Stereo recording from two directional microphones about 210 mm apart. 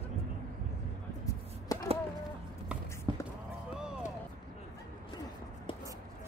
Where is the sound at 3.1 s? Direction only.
20° right (ahead or behind).